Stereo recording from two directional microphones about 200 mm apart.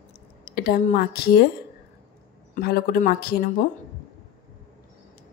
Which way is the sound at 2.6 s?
50° left (ahead or behind).